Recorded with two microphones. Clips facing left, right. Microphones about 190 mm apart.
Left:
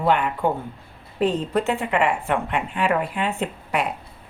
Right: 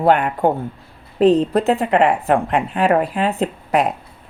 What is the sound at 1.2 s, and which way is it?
Speech, 35° right (ahead or behind).